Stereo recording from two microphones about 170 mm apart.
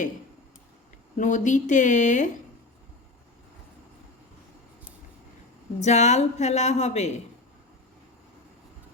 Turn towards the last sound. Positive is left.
turn(degrees=40)  # may be behind; listen again after turning